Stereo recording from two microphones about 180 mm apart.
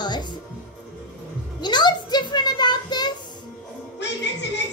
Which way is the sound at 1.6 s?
25° left (ahead or behind).